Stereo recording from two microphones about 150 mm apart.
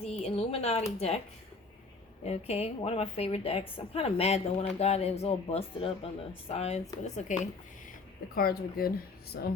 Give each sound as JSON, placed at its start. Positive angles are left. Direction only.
{"t": 0.0, "sound": "a sound", "side_deg": 45}
{"t": 0.9, "sound": "speech", "side_deg": 45}
{"t": 2.2, "sound": "a woman's voice", "side_deg": 45}
{"t": 8.4, "sound": "speech", "side_deg": 80}